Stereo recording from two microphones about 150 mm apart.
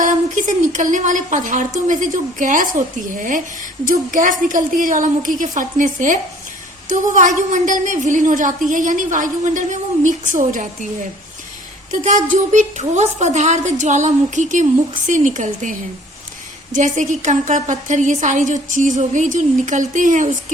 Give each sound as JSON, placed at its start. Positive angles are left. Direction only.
{"t": 0.0, "sound": "a woman's voice", "side_deg": -60}
{"t": 11.9, "sound": "a woman's voice", "side_deg": -55}
{"t": 16.7, "sound": "a woman's voice", "side_deg": -55}